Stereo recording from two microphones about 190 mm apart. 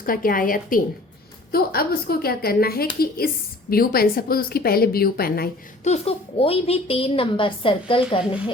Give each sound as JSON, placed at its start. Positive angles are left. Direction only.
{"t": 0.0, "sound": "a woman's voice", "side_deg": 50}
{"t": 5.8, "sound": "a woman's voice", "side_deg": 35}